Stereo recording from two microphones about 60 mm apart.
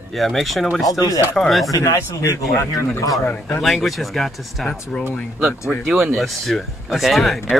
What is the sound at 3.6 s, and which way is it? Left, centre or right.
Speech, centre.